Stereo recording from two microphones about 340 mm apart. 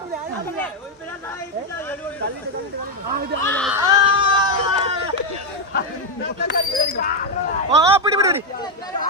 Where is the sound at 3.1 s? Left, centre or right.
Right.